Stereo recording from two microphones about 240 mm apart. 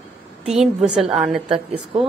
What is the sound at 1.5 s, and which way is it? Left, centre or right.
Speech, right.